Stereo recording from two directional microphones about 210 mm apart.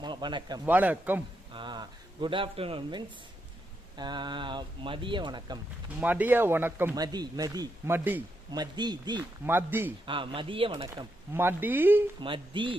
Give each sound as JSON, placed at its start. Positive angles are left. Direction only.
{"t": 0.0, "sound": "a man's voice", "side_deg": -20}
{"t": 0.7, "sound": "speech", "side_deg": -10}
{"t": 1.5, "sound": "speech", "side_deg": -20}
{"t": 6.0, "sound": "speech", "side_deg": -10}
{"t": 8.6, "sound": "speech", "side_deg": -20}
{"t": 10.1, "sound": "speech", "side_deg": -25}
{"t": 10.8, "sound": "speech", "side_deg": -15}
{"t": 12.2, "sound": "speech", "side_deg": -25}